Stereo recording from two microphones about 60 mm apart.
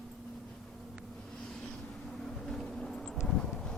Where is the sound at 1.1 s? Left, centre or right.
Centre.